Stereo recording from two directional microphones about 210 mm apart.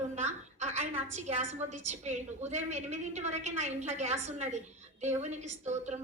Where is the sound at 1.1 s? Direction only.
35° right (ahead or behind).